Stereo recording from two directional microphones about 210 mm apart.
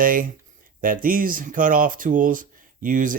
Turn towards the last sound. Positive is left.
turn(degrees=-40)  # may be behind; listen again after turning